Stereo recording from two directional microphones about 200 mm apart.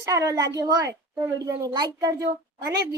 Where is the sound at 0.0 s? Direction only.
15° right (ahead or behind).